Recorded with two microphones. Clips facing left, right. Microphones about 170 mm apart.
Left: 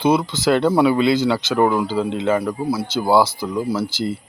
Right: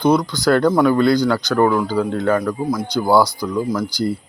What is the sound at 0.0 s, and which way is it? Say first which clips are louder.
Speech: right 1 dB; 5° left (ahead or behind).